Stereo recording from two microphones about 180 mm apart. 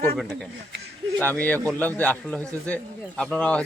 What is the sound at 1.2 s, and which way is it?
A man's voice, 10° left (ahead or behind).